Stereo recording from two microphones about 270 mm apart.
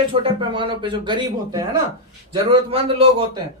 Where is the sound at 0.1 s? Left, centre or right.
Centre.